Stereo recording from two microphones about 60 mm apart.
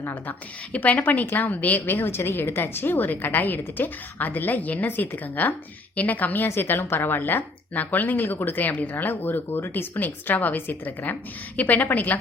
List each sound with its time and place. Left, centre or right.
0.0 s speech: left